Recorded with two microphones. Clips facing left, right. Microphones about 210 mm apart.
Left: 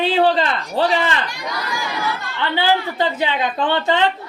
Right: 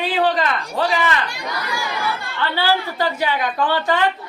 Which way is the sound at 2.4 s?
20° left (ahead or behind).